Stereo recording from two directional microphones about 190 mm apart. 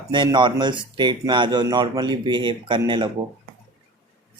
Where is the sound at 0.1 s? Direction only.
25° right (ahead or behind).